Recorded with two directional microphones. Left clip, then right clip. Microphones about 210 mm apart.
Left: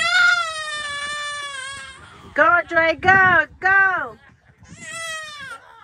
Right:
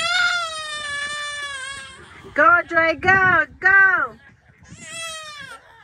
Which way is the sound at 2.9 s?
15° left (ahead or behind).